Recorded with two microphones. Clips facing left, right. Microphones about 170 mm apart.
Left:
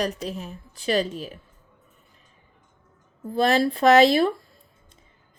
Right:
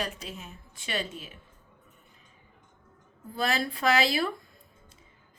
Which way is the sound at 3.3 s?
35° left (ahead or behind).